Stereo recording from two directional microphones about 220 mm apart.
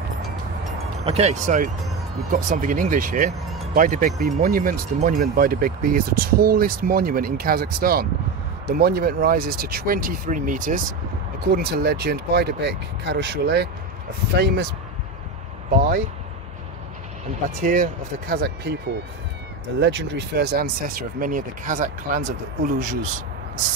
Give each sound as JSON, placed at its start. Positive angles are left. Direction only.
{"t": 1.0, "sound": "speech", "side_deg": -30}
{"t": 17.6, "sound": "speech", "side_deg": -35}
{"t": 19.8, "sound": "speech", "side_deg": -55}